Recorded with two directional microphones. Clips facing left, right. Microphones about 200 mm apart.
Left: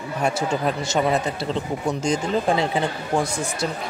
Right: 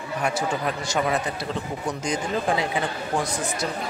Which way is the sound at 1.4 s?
25° left (ahead or behind).